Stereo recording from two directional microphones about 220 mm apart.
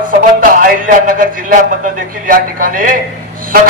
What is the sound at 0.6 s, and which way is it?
A man's voice, 40° right (ahead or behind).